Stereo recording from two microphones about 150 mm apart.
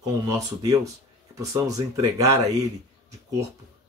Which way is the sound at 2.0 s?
20° right (ahead or behind).